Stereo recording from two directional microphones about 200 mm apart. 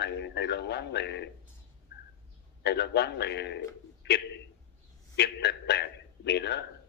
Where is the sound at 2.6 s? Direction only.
55° left (ahead or behind).